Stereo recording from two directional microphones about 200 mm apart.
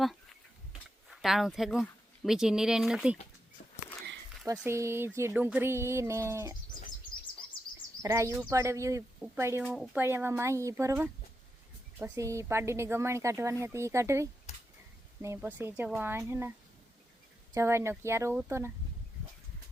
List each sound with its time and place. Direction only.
0.0 s a sound: centre (ahead or behind)
1.1 s speech: centre (ahead or behind)
4.5 s a woman's voice: 10° right (ahead or behind)
8.0 s a woman's voice: 15° right (ahead or behind)
9.6 s a woman's voice: centre (ahead or behind)
14.5 s a sound: 35° left (ahead or behind)
15.2 s a woman's voice: 10° right (ahead or behind)
17.5 s a woman's voice: 15° right (ahead or behind)